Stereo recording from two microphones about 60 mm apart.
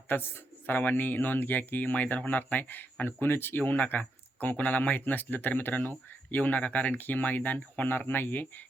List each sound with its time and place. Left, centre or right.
0.1 s speech: left